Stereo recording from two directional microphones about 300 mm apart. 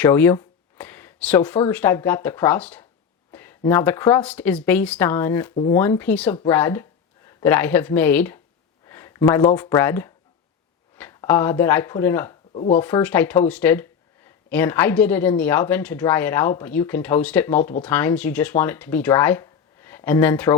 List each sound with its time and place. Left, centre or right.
0.0 s a sound: centre
1.7 s a woman's voice: centre
12.5 s speech: left
12.8 s a woman's voice: centre